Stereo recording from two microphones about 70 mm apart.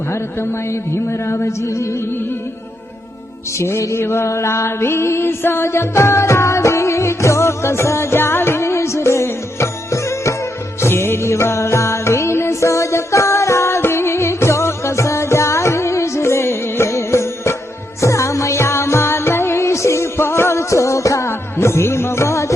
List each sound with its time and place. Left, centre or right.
0.1 s a man's voice: left
1.3 s music: left
3.6 s music: left
21.2 s music: left